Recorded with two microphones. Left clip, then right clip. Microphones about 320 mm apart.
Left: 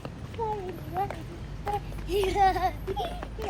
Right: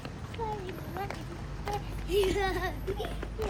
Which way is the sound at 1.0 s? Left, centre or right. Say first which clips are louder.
Left 8 dB; centre.